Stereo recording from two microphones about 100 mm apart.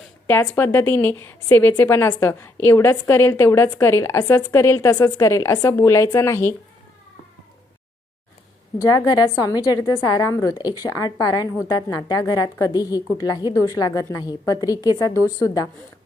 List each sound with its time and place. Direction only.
0.3 s a woman's voice: 20° left (ahead or behind)
8.8 s a woman's voice: 40° left (ahead or behind)